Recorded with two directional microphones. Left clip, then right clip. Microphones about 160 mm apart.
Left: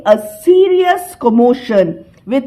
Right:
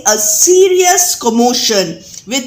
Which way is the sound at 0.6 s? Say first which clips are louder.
Right 2 dB; 35° left (ahead or behind).